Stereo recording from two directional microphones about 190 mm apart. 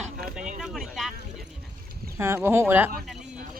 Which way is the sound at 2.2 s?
10° right (ahead or behind).